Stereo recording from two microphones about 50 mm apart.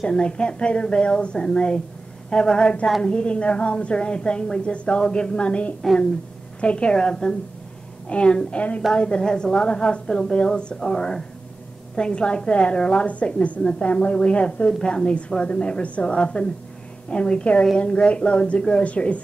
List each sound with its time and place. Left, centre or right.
0.0 s a woman's voice: centre